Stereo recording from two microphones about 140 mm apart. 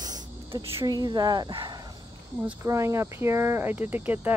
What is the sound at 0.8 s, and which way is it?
Speech, 30° right (ahead or behind).